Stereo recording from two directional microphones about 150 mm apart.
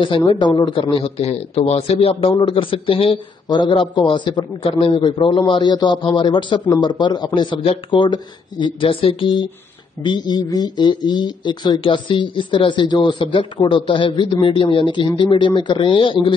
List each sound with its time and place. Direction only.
0.0 s speech: 35° left (ahead or behind)